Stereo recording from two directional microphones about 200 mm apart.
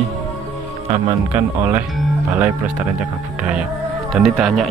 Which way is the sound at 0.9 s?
25° right (ahead or behind).